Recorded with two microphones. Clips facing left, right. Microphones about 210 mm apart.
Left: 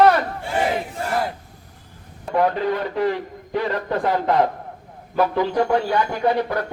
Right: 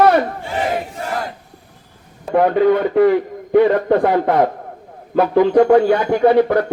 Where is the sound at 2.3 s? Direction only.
55° right (ahead or behind).